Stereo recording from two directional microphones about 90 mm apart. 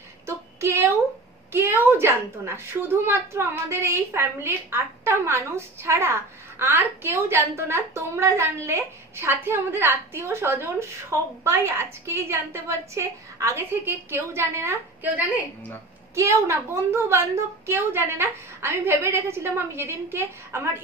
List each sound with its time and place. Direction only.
0.3 s a sound: 30° right (ahead or behind)
1.5 s a woman's voice: 25° right (ahead or behind)
16.2 s a woman's voice: 30° right (ahead or behind)